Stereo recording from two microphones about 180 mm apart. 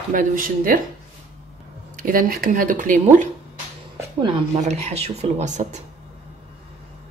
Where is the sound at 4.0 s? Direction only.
25° right (ahead or behind); by 5.7 s 40° right (ahead or behind).